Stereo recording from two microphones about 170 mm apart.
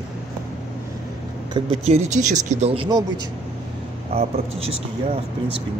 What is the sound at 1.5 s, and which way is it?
Speech, 35° right (ahead or behind).